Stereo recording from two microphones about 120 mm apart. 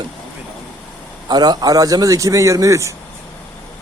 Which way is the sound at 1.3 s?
35° right (ahead or behind).